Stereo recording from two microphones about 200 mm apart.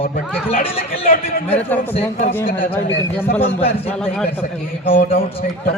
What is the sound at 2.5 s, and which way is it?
Speech, 45° left (ahead or behind).